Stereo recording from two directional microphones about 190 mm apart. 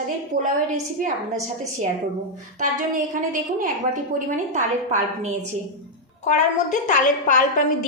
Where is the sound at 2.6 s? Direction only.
45° right (ahead or behind).